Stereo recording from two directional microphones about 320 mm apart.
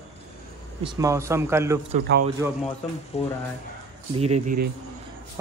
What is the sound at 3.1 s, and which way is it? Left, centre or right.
Speech, centre.